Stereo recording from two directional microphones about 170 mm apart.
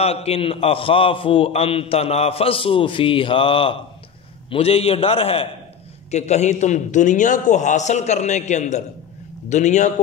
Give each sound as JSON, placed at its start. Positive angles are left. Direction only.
{"t": 0.0, "sound": "a man's voice", "side_deg": 35}